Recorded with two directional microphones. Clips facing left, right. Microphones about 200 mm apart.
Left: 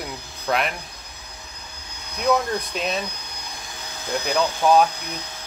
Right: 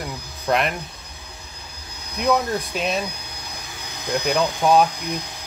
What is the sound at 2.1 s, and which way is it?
Speech, centre (ahead or behind).